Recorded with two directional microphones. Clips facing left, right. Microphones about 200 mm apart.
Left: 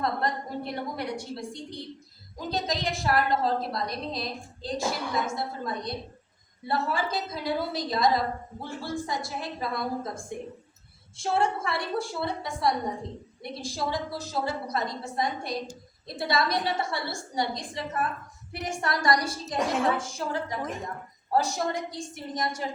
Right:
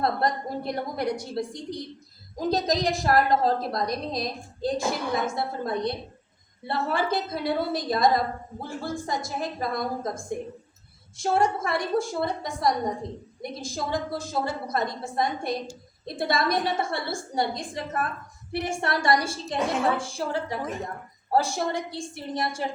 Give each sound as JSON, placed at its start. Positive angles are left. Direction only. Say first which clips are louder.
{"t": 0.0, "sound": "a woman's voice", "louder": "right 3 dB", "side_deg": -35}
{"t": 18.5, "sound": "a woman's voice", "louder": "right 3 dB", "side_deg": -30}